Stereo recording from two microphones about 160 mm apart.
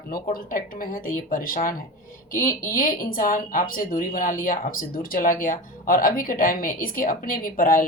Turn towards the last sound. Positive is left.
turn(degrees=60)  # may be behind; listen again after turning